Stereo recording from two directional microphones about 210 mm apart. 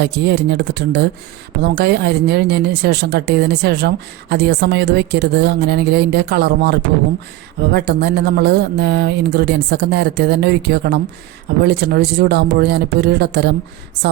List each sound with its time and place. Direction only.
0.0 s speech: 55° right (ahead or behind)